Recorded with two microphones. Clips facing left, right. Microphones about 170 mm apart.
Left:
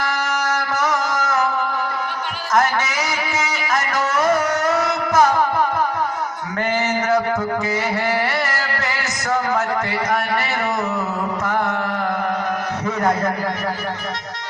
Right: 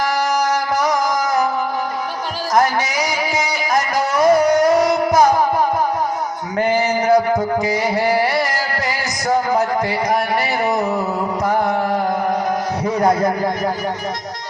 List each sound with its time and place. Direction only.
0.0 s a sound: 35° right (ahead or behind)
0.8 s carnatic music: 15° right (ahead or behind)
4.4 s music: 15° right (ahead or behind)
6.6 s music: 15° right (ahead or behind)
12.8 s music: 15° right (ahead or behind)